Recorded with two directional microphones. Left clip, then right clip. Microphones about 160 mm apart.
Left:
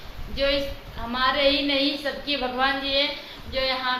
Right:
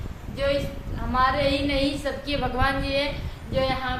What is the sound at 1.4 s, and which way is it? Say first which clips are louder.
A woman's voice: left 2 dB; 5° right (ahead or behind).